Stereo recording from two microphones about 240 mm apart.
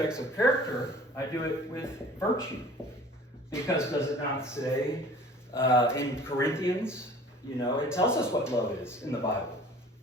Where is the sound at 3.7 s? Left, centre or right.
Centre.